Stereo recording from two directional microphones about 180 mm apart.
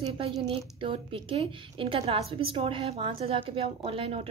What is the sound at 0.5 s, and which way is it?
A woman's voice, 30° right (ahead or behind).